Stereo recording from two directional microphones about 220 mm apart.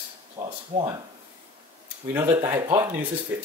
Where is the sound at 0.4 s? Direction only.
15° right (ahead or behind).